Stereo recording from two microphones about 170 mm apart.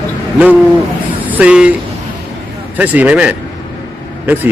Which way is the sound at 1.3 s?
10° right (ahead or behind).